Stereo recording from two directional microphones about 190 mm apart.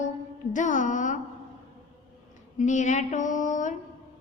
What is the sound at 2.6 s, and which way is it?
A woman's voice, 40° left (ahead or behind).